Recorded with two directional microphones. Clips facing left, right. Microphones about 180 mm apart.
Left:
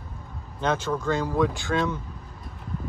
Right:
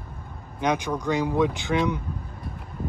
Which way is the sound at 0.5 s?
15° right (ahead or behind).